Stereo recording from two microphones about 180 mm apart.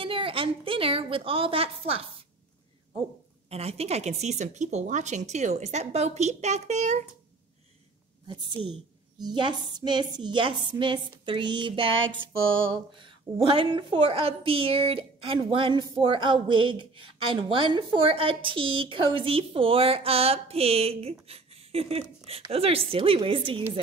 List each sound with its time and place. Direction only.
0.0 s a woman's voice: 30° right (ahead or behind)
3.4 s a woman's voice: 35° right (ahead or behind)
8.3 s a woman's voice: 25° right (ahead or behind)